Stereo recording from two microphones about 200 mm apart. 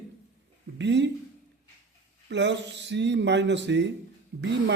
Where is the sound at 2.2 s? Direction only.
60° right (ahead or behind).